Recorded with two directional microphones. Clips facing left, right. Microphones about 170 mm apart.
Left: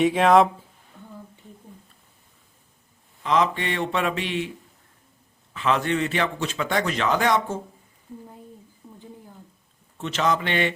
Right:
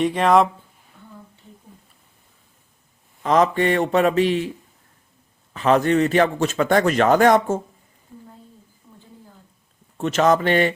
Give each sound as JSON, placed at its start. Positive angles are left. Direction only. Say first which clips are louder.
{"t": 0.0, "sound": "speech", "louder": "even", "side_deg": 0}
{"t": 3.2, "sound": "a man's voice", "louder": "right 5 dB", "side_deg": -45}
{"t": 5.5, "sound": "a man's voice", "louder": "right 6 dB", "side_deg": -40}
{"t": 10.0, "sound": "a man's voice", "louder": "right 7 dB", "side_deg": -45}